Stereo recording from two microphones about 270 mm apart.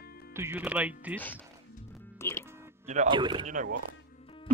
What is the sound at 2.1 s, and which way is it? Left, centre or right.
Speech, centre.